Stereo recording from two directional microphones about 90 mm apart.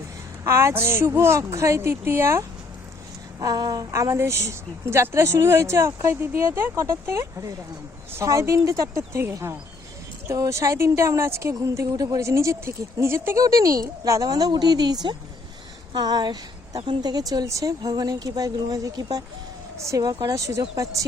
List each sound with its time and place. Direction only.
0.4 s a woman's voice: 30° right (ahead or behind)
3.4 s a woman's voice: 45° right (ahead or behind)
16.0 s speech: 50° right (ahead or behind)
19.8 s a woman's voice: 35° right (ahead or behind)
20.1 s a woman's voice: 45° right (ahead or behind)